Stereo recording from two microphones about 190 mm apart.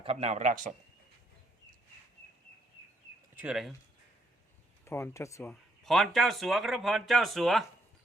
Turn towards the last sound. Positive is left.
turn(degrees=0)  # may be behind; listen again after turning